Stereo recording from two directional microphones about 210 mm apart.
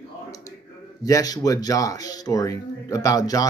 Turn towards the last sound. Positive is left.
turn(degrees=15)  # may be behind; listen again after turning